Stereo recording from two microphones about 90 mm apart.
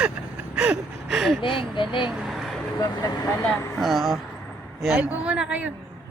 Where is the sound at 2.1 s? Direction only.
5° right (ahead or behind).